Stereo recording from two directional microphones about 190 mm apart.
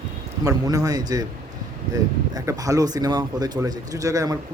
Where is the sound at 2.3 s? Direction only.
20° right (ahead or behind).